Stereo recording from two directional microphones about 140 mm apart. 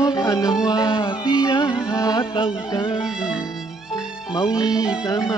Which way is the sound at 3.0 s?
5° right (ahead or behind).